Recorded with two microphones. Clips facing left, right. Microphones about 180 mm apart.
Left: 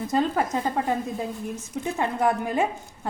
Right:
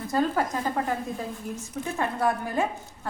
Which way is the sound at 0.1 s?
20° left (ahead or behind).